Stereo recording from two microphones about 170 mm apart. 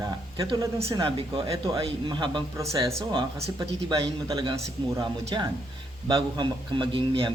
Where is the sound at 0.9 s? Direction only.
25° right (ahead or behind).